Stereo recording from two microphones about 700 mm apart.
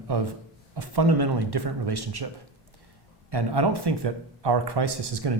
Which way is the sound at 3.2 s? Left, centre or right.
Right.